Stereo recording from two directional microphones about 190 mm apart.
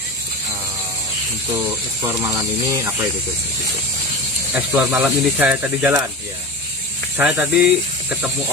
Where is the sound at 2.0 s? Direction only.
15° right (ahead or behind).